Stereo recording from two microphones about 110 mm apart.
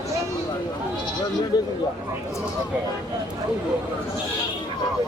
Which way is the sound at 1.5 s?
40° left (ahead or behind).